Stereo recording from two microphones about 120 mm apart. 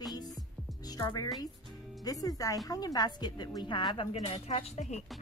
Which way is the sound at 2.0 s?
30° left (ahead or behind).